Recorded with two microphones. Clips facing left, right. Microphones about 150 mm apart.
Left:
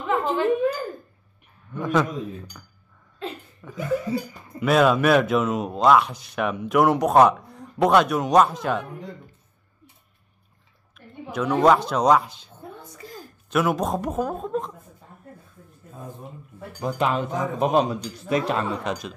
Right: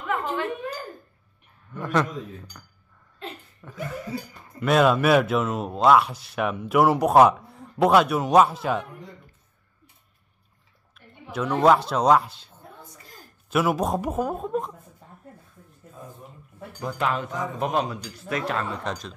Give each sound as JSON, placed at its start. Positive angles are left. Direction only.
{"t": 0.0, "sound": "a sound", "side_deg": 25}
{"t": 1.7, "sound": "speech", "side_deg": 0}
{"t": 3.6, "sound": "speech", "side_deg": 0}
{"t": 11.3, "sound": "speech", "side_deg": 0}
{"t": 16.8, "sound": "a man's voice", "side_deg": 20}